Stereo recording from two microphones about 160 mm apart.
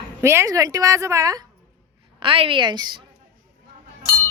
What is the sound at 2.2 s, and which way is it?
Speech, 35° right (ahead or behind).